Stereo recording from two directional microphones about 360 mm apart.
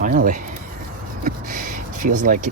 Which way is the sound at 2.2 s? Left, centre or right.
Right.